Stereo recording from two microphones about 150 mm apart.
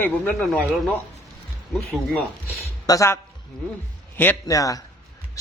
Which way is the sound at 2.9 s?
20° left (ahead or behind).